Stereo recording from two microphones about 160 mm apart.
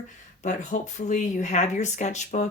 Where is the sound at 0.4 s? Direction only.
50° left (ahead or behind).